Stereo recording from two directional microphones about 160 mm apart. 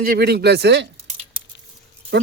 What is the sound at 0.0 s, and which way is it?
Speech, 70° right (ahead or behind).